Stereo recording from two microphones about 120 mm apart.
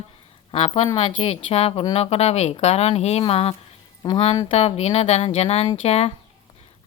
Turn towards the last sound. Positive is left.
turn(degrees=55)  # may be behind; listen again after turning